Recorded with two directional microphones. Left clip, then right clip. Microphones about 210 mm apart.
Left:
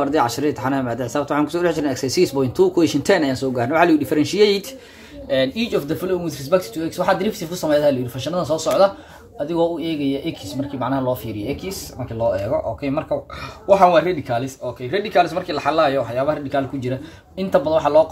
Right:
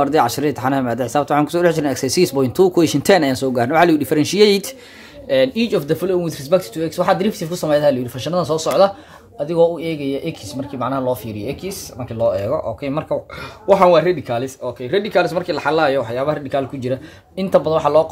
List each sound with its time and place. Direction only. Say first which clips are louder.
0.0 s speech: right 3 dB; 35° right (ahead or behind)
5.3 s speech: right 4 dB; 55° right (ahead or behind)
12.4 s speech: right 1 dB; 50° right (ahead or behind)